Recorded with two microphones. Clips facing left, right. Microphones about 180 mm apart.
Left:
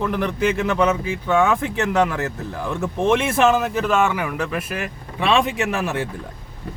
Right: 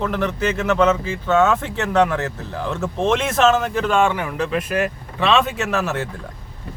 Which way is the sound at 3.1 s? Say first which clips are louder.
Even; 10° left (ahead or behind).